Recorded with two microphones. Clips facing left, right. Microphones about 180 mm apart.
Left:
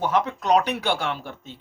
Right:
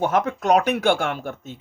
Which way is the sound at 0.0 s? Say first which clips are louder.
Right 2 dB; 50° right (ahead or behind).